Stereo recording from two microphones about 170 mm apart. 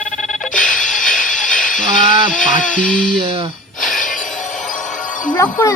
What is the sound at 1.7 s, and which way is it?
Speech, 50° left (ahead or behind).